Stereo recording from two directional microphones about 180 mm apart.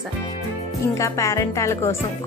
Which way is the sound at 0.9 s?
15° left (ahead or behind).